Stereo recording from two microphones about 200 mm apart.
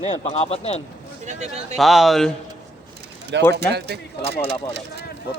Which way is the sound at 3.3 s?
60° right (ahead or behind).